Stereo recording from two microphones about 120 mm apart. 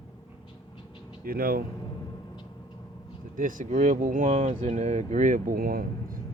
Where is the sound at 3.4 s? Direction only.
90° right.